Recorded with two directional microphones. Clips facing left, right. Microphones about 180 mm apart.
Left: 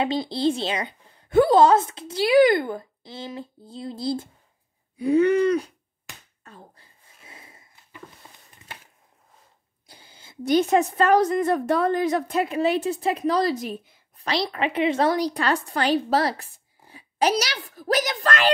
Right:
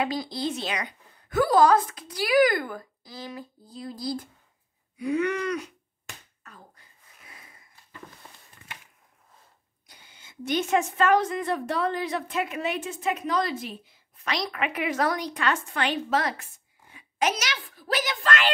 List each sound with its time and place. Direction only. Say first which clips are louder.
0.0 s a woman's voice: left 5 dB; 25° left (ahead or behind)
6.4 s a sound: left 8 dB; 30° left (ahead or behind)
9.8 s a woman's voice: left 4 dB; 30° left (ahead or behind)